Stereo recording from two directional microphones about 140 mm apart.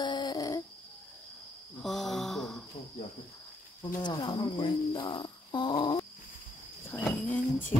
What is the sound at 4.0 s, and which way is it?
A child's voice, 35° left (ahead or behind).